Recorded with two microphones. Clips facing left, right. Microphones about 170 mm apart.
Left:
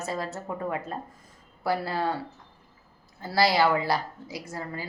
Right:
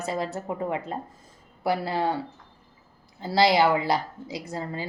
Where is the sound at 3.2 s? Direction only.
20° right (ahead or behind).